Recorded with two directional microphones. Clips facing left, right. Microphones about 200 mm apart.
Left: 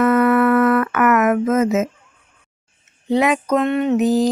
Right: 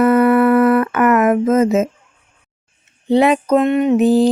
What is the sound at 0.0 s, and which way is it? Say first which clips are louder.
Music: right 3 dB; 30° right (ahead or behind).